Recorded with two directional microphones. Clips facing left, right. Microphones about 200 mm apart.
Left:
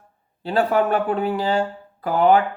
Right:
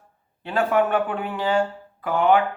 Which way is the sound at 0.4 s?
35° left (ahead or behind).